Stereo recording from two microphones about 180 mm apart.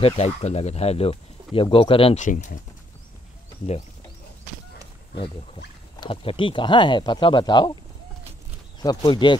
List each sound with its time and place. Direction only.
0.0 s speech: 35° left (ahead or behind)
2.2 s speech: 45° left (ahead or behind)
5.9 s speech: 30° left (ahead or behind)
8.8 s speech: 25° left (ahead or behind)